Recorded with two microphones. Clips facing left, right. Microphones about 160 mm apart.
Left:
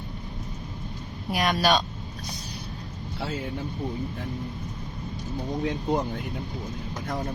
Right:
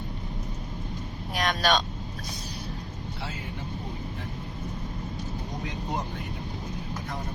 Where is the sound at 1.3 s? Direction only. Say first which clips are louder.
Left 3 dB; 5° left (ahead or behind).